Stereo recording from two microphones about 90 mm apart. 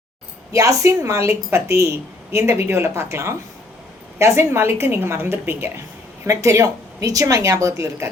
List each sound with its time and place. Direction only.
0.5 s a woman's voice: 40° right (ahead or behind)